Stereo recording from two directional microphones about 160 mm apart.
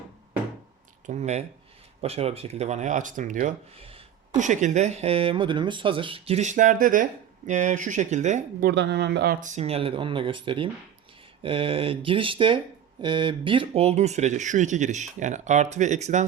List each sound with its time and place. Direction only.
1.0 s speech: 45° right (ahead or behind)
3.8 s a sound: 35° right (ahead or behind)
4.4 s speech: 50° right (ahead or behind)
8.6 s speech: 90° right
9.4 s speech: 45° right (ahead or behind)